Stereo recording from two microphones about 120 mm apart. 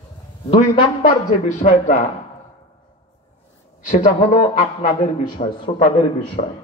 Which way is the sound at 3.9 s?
90° left.